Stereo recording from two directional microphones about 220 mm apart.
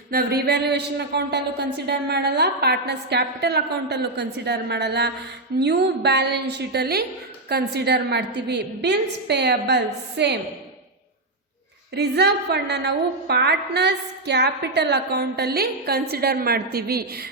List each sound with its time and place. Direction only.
0.1 s a woman's voice: 45° right (ahead or behind)
11.9 s a woman's voice: 50° right (ahead or behind)